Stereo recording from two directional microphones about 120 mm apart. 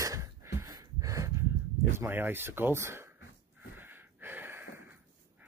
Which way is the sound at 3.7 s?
15° right (ahead or behind).